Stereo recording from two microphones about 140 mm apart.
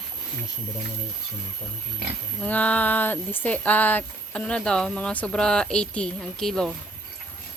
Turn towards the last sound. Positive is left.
turn(degrees=5)  # may be behind; listen again after turning